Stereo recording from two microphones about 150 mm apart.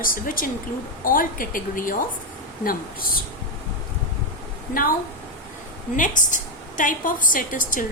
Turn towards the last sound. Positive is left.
turn(degrees=65)  # may be behind; listen again after turning